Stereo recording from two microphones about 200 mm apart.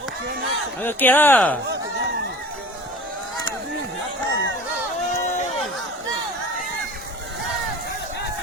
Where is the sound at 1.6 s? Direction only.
55° right (ahead or behind).